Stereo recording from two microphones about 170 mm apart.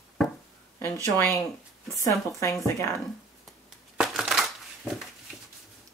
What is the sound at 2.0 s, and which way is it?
Speech, 20° left (ahead or behind).